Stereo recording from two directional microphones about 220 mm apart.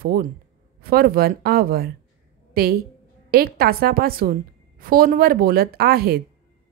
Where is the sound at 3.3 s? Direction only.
45° right (ahead or behind).